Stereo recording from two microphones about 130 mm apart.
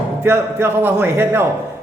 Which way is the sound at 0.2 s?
15° right (ahead or behind).